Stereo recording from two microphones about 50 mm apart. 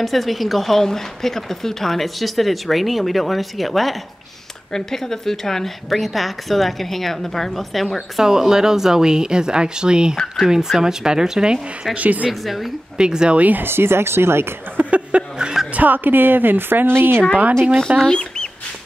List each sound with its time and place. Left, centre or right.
0.0 s speech: centre
8.2 s speech: centre
12.0 s speech: right
12.3 s speech: centre
13.0 s speech: centre
13.4 s speech: right
13.7 s speech: right
14.8 s speech: right
15.7 s speech: right
18.0 s speech: centre